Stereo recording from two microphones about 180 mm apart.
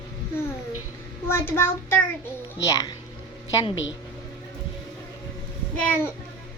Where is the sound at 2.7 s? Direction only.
20° left (ahead or behind).